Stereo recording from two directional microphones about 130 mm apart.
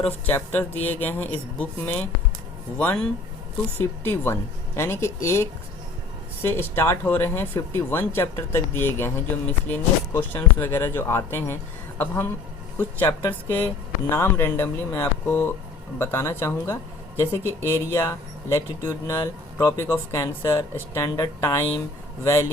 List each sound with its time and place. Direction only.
0.3 s speech: 15° left (ahead or behind)